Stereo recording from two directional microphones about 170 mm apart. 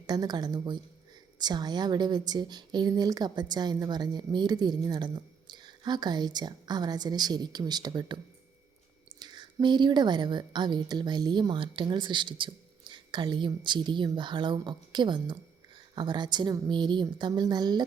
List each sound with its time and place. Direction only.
0.1 s speech: 25° right (ahead or behind)